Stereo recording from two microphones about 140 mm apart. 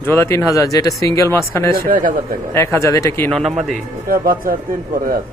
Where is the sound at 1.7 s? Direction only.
85° right.